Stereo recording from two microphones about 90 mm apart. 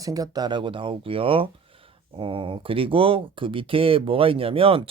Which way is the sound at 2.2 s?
75° right (ahead or behind).